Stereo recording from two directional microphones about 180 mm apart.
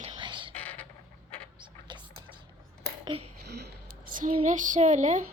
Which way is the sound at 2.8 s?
25° right (ahead or behind).